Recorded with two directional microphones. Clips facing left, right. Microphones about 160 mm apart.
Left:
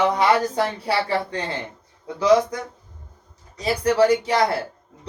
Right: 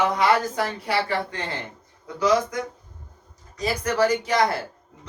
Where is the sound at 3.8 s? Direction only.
30° left (ahead or behind).